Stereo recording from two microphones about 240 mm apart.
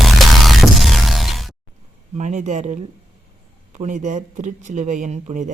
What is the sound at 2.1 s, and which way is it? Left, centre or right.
Speech, right.